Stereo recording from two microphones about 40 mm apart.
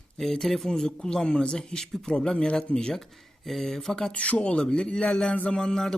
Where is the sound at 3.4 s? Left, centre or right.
Centre.